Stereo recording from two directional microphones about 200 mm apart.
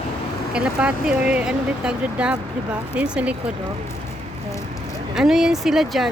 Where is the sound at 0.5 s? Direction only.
5° right (ahead or behind).